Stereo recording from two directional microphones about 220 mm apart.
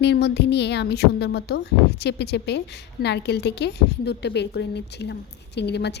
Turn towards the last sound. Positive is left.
turn(degrees=50)  # may be behind; listen again after turning